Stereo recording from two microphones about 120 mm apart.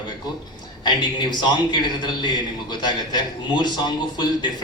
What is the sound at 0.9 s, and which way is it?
A man's voice, 40° left (ahead or behind).